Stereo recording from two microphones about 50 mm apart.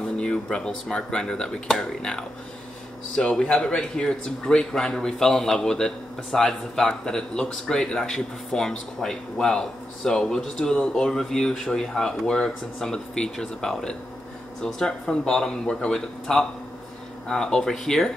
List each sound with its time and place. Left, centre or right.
0.2 s speech: centre